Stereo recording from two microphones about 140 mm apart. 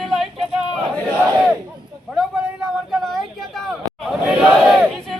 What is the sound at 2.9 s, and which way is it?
Chatter, centre (ahead or behind).